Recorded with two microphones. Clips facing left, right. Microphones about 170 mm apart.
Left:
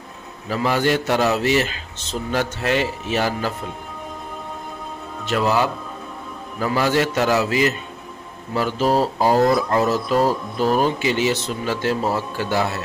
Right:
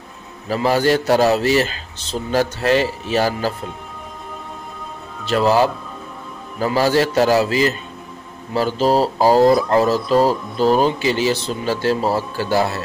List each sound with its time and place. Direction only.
0.5 s a man's voice: 35° right (ahead or behind)
5.2 s a man's voice: 35° right (ahead or behind)